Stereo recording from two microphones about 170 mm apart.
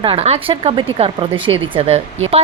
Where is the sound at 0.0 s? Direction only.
35° right (ahead or behind).